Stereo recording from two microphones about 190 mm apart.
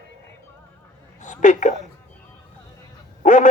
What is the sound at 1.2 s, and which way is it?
Speech, 40° left (ahead or behind).